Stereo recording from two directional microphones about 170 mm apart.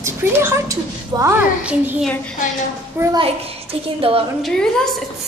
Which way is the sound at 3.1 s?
35° right (ahead or behind).